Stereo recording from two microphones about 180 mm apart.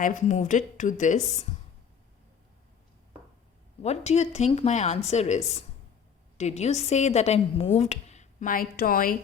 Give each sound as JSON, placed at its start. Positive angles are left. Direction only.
{"t": 0.0, "sound": "speech", "side_deg": 45}
{"t": 3.8, "sound": "speech", "side_deg": 35}